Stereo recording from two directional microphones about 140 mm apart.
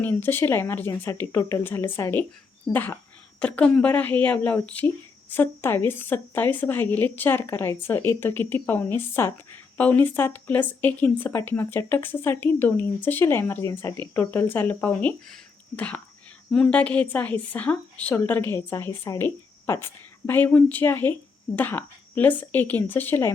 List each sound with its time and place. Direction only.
0.0 s a woman's voice: 15° left (ahead or behind)